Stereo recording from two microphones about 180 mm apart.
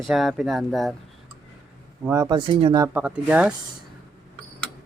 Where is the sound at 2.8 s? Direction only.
10° right (ahead or behind).